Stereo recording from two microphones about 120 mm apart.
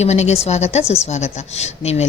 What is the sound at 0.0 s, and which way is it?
Speech, 70° left (ahead or behind).